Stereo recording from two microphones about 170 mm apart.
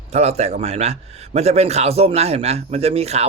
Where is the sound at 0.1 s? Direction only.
40° right (ahead or behind).